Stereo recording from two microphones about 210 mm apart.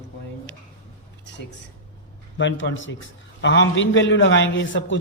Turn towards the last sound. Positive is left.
turn(degrees=60)  # may be behind; listen again after turning